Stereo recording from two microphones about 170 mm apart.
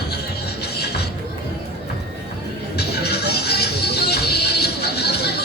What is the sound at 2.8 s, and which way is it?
Music, 70° left (ahead or behind).